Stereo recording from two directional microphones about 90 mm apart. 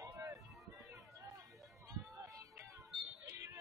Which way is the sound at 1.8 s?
35° right (ahead or behind).